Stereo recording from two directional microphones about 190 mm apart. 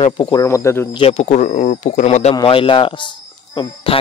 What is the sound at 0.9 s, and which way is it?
Speech, 35° left (ahead or behind).